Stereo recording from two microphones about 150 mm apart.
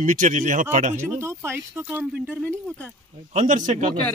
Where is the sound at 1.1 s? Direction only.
15° right (ahead or behind).